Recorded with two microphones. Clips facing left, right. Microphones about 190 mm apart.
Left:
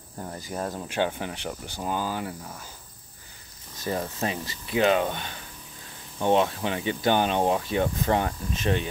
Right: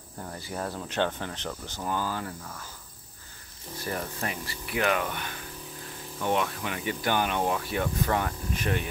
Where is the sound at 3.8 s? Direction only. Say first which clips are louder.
Left 4 dB; 20° left (ahead or behind).